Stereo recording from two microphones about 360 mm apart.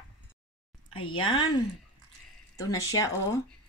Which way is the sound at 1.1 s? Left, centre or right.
Centre.